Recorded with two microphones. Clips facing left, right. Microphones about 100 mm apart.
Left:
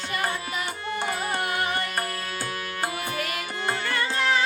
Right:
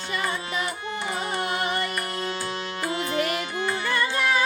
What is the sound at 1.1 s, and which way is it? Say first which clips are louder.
Music: right 1 dB; 25° right (ahead or behind).